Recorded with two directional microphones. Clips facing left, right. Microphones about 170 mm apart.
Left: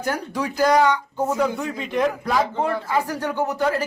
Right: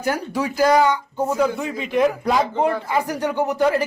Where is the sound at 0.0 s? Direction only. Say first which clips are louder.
Right 2 dB; 5° right (ahead or behind).